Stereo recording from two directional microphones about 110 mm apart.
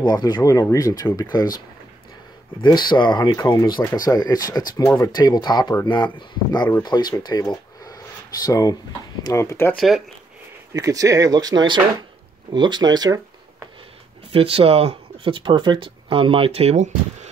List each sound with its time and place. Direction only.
0.0 s speech: 40° left (ahead or behind)
2.6 s speech: 45° left (ahead or behind); by 9.7 s 30° left (ahead or behind)
9.8 s speech: centre (ahead or behind)
10.7 s speech: 30° right (ahead or behind)
14.3 s speech: 60° right (ahead or behind); by 17.3 s 90° right